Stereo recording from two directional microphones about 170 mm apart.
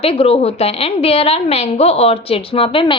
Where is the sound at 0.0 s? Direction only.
35° left (ahead or behind).